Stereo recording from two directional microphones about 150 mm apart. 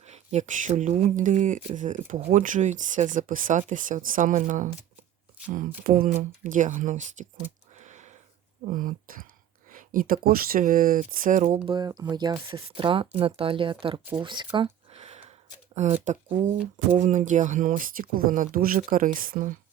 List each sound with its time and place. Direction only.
0.0 s speech: 45° right (ahead or behind)
7.8 s a sound: 50° right (ahead or behind)
8.6 s speech: 65° right (ahead or behind)
11.6 s speech: 35° right (ahead or behind)
14.5 s a sound: 40° right (ahead or behind)
15.7 s speech: 50° right (ahead or behind); by 19.5 s 65° right (ahead or behind)